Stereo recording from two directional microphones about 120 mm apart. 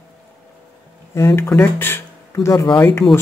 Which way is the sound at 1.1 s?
20° left (ahead or behind).